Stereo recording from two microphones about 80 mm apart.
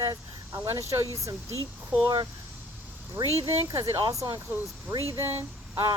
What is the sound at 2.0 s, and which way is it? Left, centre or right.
Speech, right.